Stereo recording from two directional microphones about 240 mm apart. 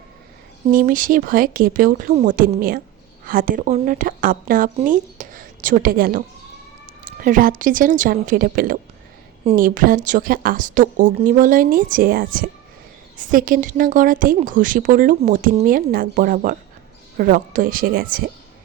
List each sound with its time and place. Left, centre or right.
0.7 s a woman's voice: right